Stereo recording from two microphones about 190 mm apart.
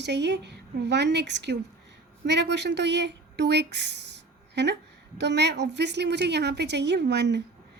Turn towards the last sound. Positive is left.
turn(degrees=-60)  # may be behind; listen again after turning